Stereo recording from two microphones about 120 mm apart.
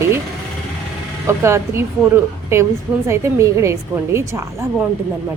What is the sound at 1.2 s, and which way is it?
A woman's voice, 20° right (ahead or behind).